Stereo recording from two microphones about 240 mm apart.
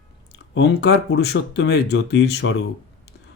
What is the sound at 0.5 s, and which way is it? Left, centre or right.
Speech, left.